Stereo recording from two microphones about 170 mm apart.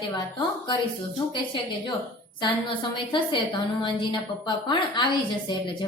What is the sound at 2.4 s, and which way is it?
A woman's voice, 30° left (ahead or behind).